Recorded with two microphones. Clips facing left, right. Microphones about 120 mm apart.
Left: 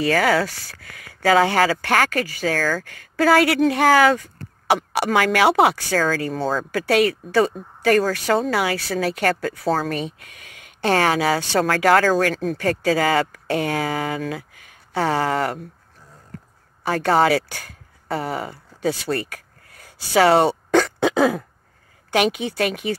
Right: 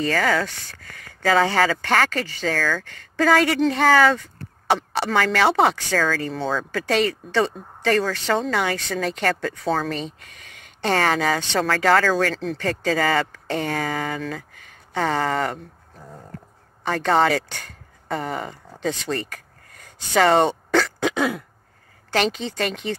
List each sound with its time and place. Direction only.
0.0 s speech: 10° left (ahead or behind)
16.8 s speech: 5° left (ahead or behind)
18.8 s a sound: 10° left (ahead or behind)
21.0 s throat clearing: 30° left (ahead or behind)
22.1 s speech: 10° left (ahead or behind)